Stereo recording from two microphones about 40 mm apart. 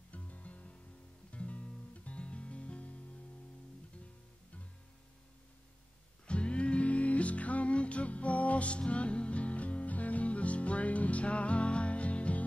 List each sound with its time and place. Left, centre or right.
0.1 s music: left
6.2 s music: left